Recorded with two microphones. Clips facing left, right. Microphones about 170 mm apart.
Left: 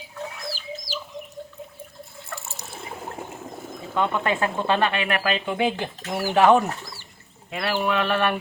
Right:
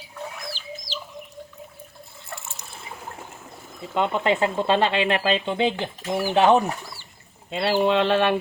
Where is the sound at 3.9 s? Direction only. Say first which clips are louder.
Right 2 dB; 20° right (ahead or behind).